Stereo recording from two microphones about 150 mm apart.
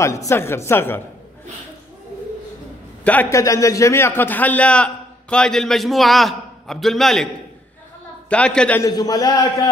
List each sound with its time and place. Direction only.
0.0 s a man's voice: 20° left (ahead or behind)
3.0 s a man's voice: 10° left (ahead or behind)
8.3 s a man's voice: 5° left (ahead or behind)
8.8 s a man's voice: 25° left (ahead or behind)